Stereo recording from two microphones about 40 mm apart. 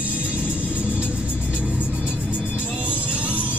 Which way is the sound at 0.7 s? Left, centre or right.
Right.